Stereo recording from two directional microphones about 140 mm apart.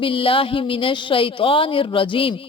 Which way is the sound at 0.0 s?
40° left (ahead or behind).